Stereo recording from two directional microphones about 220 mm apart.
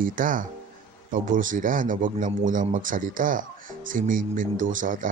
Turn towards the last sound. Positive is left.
turn(degrees=-35)  # may be behind; listen again after turning